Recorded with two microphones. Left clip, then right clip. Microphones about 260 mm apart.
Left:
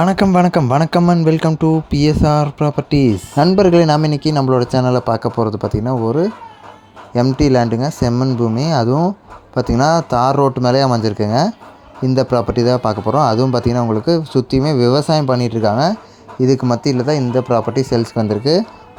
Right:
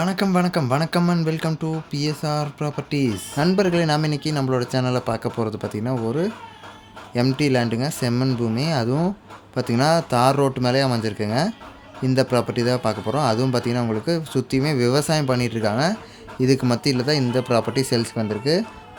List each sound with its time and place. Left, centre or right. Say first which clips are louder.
0.0 s speech: left 9 dB; left
7.1 s speech: left 7 dB; centre